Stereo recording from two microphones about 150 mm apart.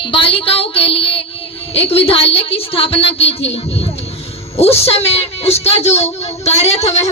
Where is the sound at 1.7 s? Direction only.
40° left (ahead or behind).